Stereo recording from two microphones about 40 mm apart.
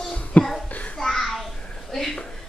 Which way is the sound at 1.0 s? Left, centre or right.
Centre.